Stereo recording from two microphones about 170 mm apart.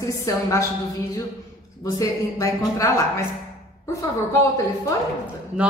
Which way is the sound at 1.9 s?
20° left (ahead or behind).